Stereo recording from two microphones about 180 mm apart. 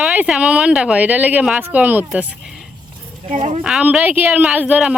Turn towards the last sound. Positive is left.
turn(degrees=-10)  # may be behind; listen again after turning